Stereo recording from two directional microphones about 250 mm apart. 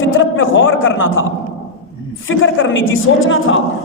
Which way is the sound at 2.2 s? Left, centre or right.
Left.